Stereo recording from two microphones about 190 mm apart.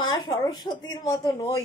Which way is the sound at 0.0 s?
25° left (ahead or behind).